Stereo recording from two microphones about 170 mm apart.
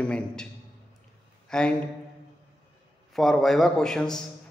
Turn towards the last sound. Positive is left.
turn(degrees=5)  # may be behind; listen again after turning